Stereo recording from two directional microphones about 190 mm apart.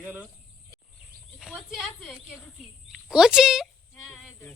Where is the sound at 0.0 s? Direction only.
10° right (ahead or behind).